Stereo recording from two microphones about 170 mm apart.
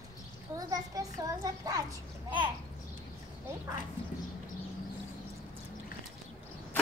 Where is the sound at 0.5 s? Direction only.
20° right (ahead or behind).